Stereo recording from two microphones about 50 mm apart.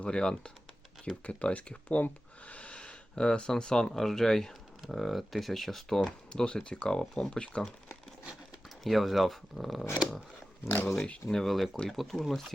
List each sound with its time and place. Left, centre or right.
0.0 s speech: centre
6.0 s speech: centre
8.8 s speech: centre
11.0 s speech: centre
11.4 s speech: centre